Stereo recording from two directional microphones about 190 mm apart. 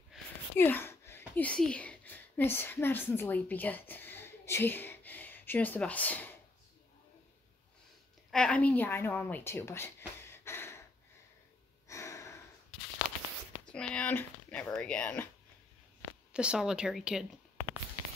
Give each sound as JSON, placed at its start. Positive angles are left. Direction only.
{"t": 0.6, "sound": "speech", "side_deg": 10}
{"t": 8.3, "sound": "speech", "side_deg": 5}
{"t": 11.9, "sound": "a sound", "side_deg": 15}
{"t": 13.7, "sound": "speech", "side_deg": 5}
{"t": 16.3, "sound": "a woman's voice", "side_deg": -5}